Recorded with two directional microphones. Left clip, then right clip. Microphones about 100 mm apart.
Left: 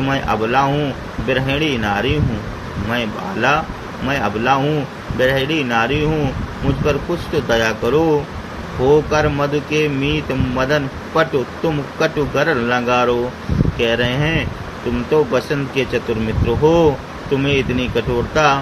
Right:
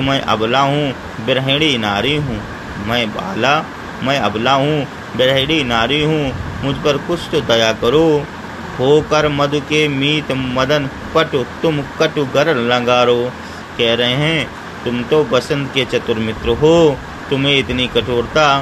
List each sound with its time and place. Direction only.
0.0 s speech: 30° right (ahead or behind)